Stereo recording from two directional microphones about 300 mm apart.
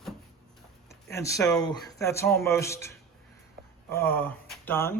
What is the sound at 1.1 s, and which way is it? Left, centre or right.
Speech, centre.